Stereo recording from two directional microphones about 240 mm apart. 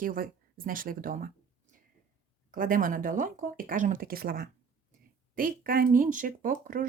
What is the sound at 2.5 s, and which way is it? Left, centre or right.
Speech, right.